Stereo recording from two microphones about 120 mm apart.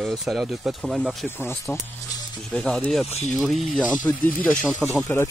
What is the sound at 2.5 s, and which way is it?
Speech, 10° left (ahead or behind).